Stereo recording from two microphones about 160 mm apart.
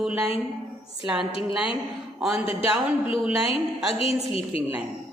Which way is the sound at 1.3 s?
35° left (ahead or behind).